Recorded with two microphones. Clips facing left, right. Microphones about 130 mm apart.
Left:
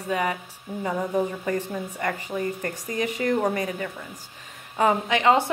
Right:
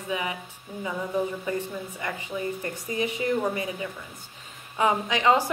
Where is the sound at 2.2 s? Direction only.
50° left (ahead or behind).